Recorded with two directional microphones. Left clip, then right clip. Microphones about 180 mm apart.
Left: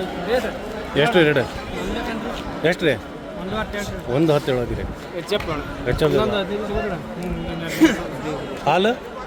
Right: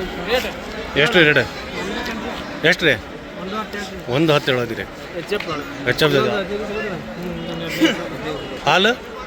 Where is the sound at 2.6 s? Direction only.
10° left (ahead or behind).